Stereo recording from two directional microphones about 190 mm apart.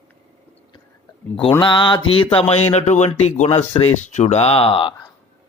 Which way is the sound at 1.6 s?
25° left (ahead or behind).